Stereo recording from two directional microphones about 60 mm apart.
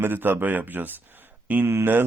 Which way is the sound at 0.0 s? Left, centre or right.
Right.